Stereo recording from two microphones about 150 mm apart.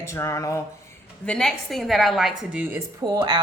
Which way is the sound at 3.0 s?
25° right (ahead or behind).